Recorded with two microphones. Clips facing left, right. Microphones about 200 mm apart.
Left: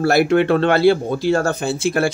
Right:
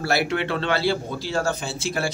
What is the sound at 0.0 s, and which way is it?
Speech, 50° left (ahead or behind).